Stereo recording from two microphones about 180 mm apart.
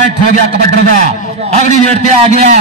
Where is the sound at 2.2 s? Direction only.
40° right (ahead or behind).